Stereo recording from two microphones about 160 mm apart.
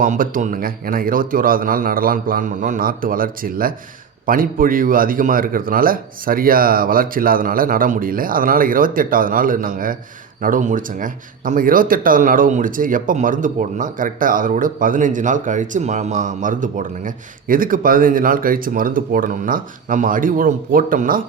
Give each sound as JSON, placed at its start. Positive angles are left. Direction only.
{"t": 0.0, "sound": "speech", "side_deg": -55}